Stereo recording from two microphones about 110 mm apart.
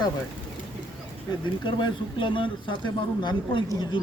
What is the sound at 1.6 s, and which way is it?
A man's voice, 45° left (ahead or behind).